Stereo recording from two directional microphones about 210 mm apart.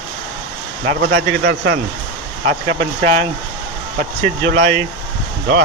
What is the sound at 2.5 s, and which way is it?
A man's voice, 35° right (ahead or behind).